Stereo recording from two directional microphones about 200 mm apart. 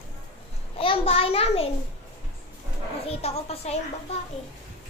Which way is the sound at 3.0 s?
30° left (ahead or behind).